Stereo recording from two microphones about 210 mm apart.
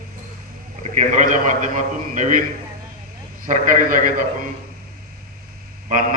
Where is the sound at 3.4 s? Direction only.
40° right (ahead or behind).